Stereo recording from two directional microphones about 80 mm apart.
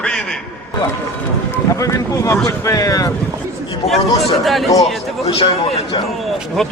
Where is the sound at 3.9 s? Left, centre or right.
Centre.